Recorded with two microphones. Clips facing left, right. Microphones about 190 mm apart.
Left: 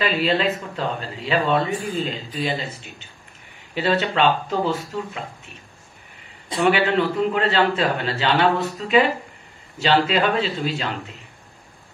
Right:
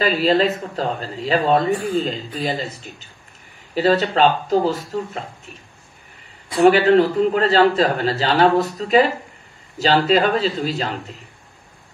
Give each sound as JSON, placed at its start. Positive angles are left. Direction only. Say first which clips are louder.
{"t": 0.0, "sound": "a man's voice", "louder": "right 4 dB", "side_deg": -40}
{"t": 6.6, "sound": "a man's voice", "louder": "right 6 dB", "side_deg": -40}